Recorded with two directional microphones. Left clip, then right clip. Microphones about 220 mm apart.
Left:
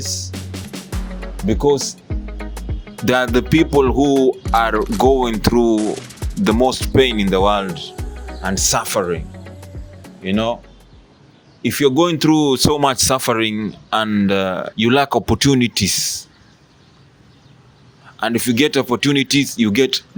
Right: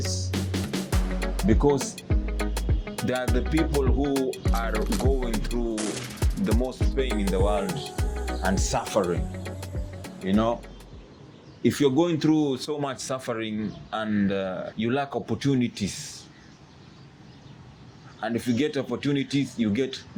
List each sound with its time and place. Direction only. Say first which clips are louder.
0.9 s music: right 1 dB; centre (ahead or behind)
1.5 s speech: left 6 dB; 55° left (ahead or behind)
1.8 s music: left 5 dB; centre (ahead or behind)
3.3 s speech: left 12 dB; 55° left (ahead or behind)
3.7 s speech: left 12 dB; centre (ahead or behind)
5.0 s speech: left 14 dB; 55° left (ahead or behind)
5.7 s music: left 11 dB; centre (ahead or behind)
6.4 s speech: left 13 dB; 55° left (ahead or behind)
7.9 s music: right 1 dB; centre (ahead or behind)
8.4 s speech: left 9 dB; 55° left (ahead or behind)
9.4 s music: even; centre (ahead or behind)
10.2 s speech: left 5 dB; 55° left (ahead or behind)
11.7 s speech: left 8 dB; 55° left (ahead or behind)
18.2 s speech: left 10 dB; 55° left (ahead or behind)